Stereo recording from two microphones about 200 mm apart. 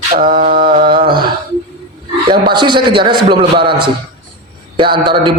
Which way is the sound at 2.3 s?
25° right (ahead or behind).